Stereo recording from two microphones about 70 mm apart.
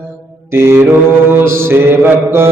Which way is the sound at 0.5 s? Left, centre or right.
Right.